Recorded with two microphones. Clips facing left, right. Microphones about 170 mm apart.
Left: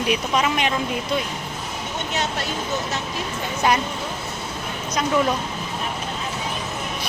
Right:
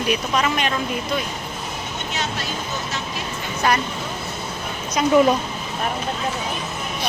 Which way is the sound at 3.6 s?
20° left (ahead or behind).